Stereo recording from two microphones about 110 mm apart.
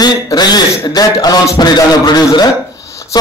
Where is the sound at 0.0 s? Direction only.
40° left (ahead or behind).